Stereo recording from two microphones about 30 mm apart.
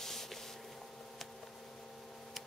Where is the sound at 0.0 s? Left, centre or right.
Centre.